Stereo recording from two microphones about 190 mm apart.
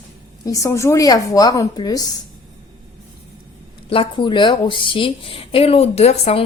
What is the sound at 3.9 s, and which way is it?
A woman's voice, 25° left (ahead or behind).